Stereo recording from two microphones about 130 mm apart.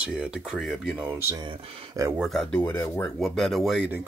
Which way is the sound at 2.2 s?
Centre (ahead or behind).